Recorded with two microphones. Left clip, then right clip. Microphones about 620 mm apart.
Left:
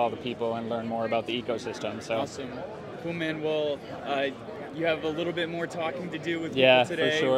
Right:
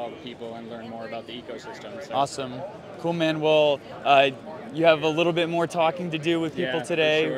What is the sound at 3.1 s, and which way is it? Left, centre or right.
A man's voice, right.